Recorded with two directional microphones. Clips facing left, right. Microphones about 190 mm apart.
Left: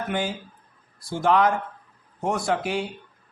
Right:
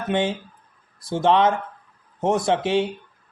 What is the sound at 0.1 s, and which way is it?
Speech, 25° right (ahead or behind).